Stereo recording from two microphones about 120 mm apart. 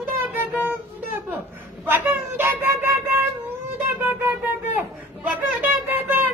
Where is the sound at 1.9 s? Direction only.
15° right (ahead or behind).